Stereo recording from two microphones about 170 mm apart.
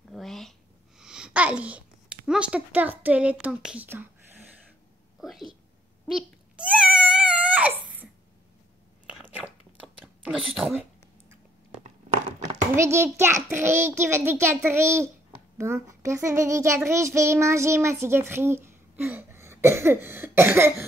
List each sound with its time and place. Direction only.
0.1 s a sound: centre (ahead or behind)
5.2 s a sound: centre (ahead or behind)
6.0 s cat: 5° right (ahead or behind)
9.1 s biting: 10° right (ahead or behind)
10.5 s speech: centre (ahead or behind)
12.7 s a child's voice: 15° right (ahead or behind)